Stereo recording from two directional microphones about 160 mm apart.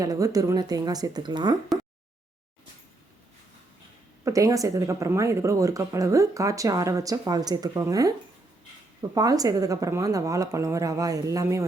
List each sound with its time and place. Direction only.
0.0 s speech: 20° right (ahead or behind)
4.3 s speech: 20° right (ahead or behind)